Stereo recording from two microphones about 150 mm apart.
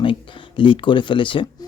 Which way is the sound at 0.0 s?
35° left (ahead or behind).